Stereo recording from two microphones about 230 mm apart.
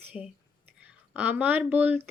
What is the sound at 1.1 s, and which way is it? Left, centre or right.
Speech, centre.